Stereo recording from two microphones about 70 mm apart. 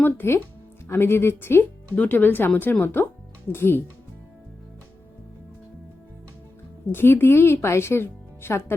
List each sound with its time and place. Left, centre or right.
0.0 s a woman's voice: left
6.8 s speech: left